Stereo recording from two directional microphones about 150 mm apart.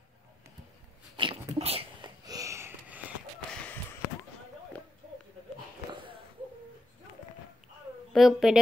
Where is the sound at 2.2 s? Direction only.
20° right (ahead or behind).